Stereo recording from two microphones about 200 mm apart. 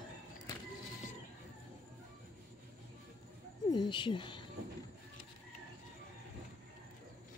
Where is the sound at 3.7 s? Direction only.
25° left (ahead or behind).